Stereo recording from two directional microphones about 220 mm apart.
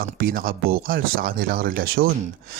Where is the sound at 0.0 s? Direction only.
40° right (ahead or behind).